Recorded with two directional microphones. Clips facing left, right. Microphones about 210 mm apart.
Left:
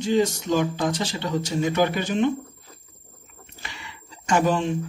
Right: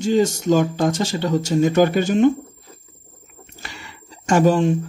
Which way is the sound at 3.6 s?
45° right (ahead or behind).